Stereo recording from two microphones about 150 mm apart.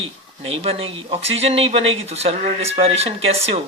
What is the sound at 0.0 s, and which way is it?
Speech, 40° right (ahead or behind).